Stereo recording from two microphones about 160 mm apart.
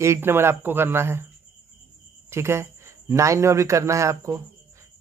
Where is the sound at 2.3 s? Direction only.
15° right (ahead or behind).